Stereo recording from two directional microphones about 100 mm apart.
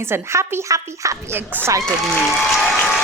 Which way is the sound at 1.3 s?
20° right (ahead or behind).